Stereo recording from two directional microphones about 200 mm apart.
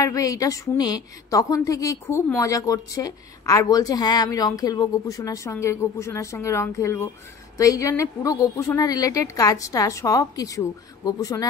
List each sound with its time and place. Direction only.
0.0 s a woman's voice: 15° left (ahead or behind)